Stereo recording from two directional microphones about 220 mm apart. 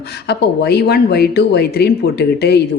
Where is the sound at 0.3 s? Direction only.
45° left (ahead or behind).